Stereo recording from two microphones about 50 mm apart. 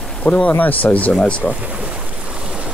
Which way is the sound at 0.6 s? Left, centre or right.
Left.